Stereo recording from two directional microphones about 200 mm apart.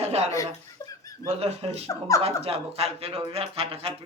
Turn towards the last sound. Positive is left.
turn(degrees=-30)  # may be behind; listen again after turning